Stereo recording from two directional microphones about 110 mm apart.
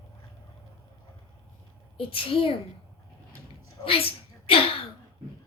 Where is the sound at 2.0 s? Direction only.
55° left (ahead or behind).